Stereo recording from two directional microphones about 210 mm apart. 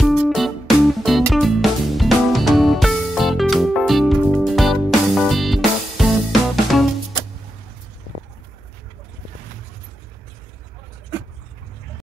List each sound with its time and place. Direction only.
0.0 s music: centre (ahead or behind)